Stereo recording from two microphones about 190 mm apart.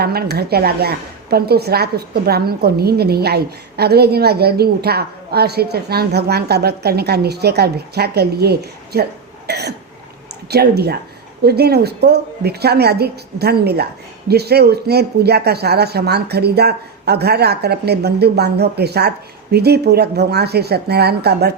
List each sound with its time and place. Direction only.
0.0 s a woman's voice: 55° right (ahead or behind)